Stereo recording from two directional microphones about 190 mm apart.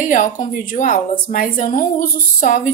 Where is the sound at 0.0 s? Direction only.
40° left (ahead or behind).